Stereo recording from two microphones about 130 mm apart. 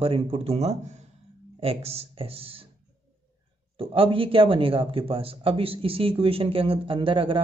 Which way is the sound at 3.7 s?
45° right (ahead or behind).